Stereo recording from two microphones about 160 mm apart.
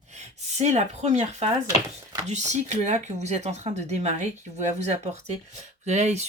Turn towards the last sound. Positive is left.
turn(degrees=-45)  # may be behind; listen again after turning